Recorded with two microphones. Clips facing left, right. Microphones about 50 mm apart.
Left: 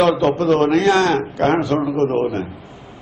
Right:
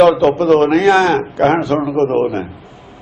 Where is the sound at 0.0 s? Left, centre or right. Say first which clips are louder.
Right 5 dB; centre.